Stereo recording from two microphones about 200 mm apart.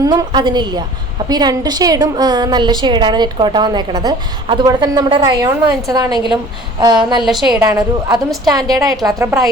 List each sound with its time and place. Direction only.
0.0 s a woman's voice: 20° right (ahead or behind)
7.2 s a woman's voice: centre (ahead or behind)
7.6 s a woman's voice: 20° right (ahead or behind)